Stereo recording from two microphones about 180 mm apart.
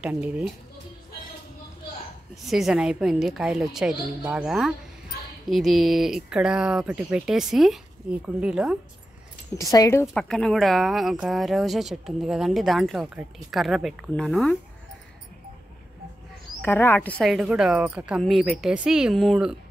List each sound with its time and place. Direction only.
0.0 s speech: 5° right (ahead or behind)
2.4 s speech: centre (ahead or behind)
9.6 s speech: 20° left (ahead or behind)
10.0 s speech: 5° left (ahead or behind)
16.6 s speech: 10° left (ahead or behind)
17.2 s speech: centre (ahead or behind)